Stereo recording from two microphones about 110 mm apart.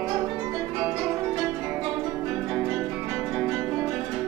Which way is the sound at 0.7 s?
35° right (ahead or behind).